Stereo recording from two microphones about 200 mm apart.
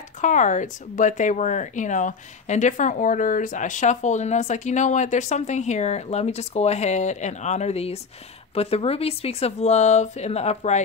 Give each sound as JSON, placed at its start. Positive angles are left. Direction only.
{"t": 0.2, "sound": "speech", "side_deg": 40}